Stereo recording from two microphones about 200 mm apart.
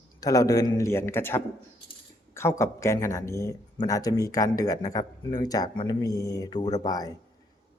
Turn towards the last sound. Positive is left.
turn(degrees=20)  # may be behind; listen again after turning